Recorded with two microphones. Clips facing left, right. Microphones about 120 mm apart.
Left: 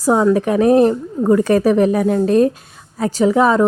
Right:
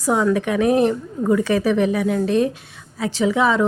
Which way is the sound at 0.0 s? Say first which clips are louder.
Left 5 dB; 35° left (ahead or behind).